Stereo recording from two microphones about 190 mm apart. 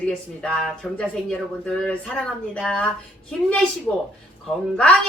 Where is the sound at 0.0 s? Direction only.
5° left (ahead or behind).